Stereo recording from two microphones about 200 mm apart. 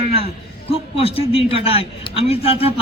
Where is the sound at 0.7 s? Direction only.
30° left (ahead or behind).